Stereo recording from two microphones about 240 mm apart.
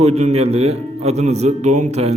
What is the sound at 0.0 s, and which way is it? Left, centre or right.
A man's voice, right.